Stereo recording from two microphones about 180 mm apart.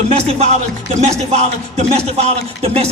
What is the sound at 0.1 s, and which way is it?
Speech, 35° right (ahead or behind).